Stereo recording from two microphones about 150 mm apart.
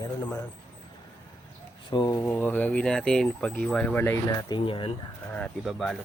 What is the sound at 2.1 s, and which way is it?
Speech, 15° left (ahead or behind).